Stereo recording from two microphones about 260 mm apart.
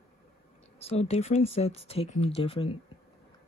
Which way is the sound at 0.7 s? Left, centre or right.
Left.